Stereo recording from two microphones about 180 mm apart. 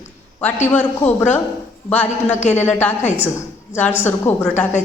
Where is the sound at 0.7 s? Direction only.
10° left (ahead or behind).